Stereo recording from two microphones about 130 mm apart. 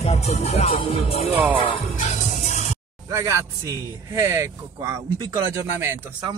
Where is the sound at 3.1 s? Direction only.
25° right (ahead or behind).